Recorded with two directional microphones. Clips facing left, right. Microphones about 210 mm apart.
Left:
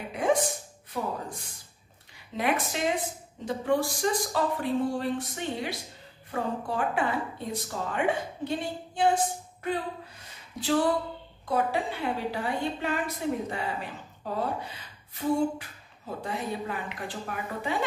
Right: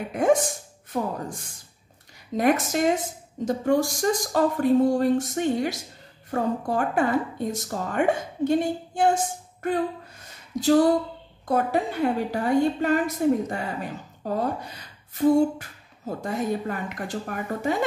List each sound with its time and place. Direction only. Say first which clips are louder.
0.1 s a woman's voice: right 5 dB; 45° right (ahead or behind)
2.3 s a woman's voice: right 7 dB; 45° right (ahead or behind)
10.2 s a sound: right 10 dB; 40° right (ahead or behind)
11.4 s a woman's voice: right 4 dB; 45° right (ahead or behind)